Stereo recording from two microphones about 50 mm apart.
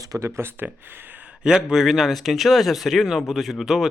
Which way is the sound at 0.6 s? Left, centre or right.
Right.